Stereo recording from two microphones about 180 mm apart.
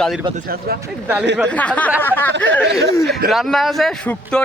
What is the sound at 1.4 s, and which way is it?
Speech, 5° left (ahead or behind).